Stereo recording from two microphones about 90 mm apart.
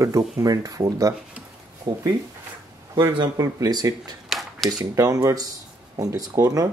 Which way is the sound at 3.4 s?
45° right (ahead or behind).